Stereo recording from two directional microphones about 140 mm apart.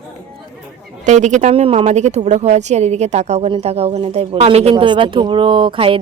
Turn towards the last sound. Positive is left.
turn(degrees=-40)  # may be behind; listen again after turning